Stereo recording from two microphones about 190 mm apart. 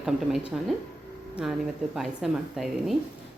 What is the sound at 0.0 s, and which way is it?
Speech, centre (ahead or behind).